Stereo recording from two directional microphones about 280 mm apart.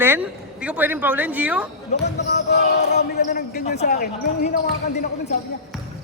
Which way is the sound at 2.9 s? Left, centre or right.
Left.